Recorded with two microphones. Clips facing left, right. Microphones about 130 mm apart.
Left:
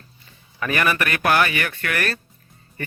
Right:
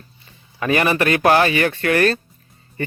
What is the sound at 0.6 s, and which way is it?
Speech, 25° right (ahead or behind).